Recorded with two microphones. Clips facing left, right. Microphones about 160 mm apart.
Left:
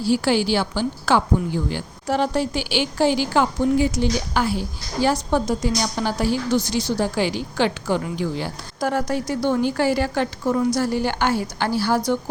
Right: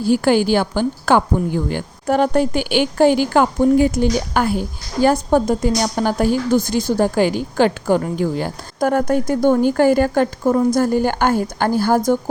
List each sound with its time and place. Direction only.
0.0 s a woman's voice: 50° right (ahead or behind)